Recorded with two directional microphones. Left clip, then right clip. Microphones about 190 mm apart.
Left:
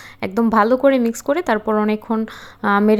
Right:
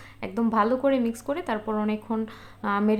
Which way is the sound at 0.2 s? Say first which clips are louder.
Left 8 dB; 45° left (ahead or behind).